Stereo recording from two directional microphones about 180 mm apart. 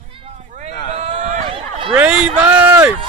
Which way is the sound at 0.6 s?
40° right (ahead or behind).